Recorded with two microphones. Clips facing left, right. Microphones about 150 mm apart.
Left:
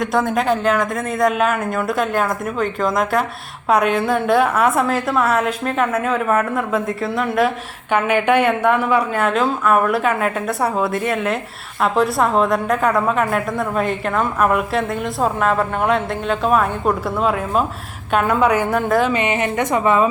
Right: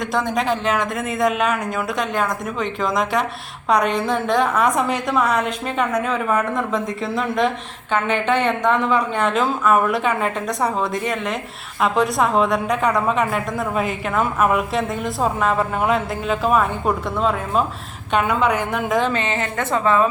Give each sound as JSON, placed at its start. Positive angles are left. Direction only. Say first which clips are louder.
{"t": 0.0, "sound": "a woman's voice", "louder": "left 3 dB", "side_deg": 0}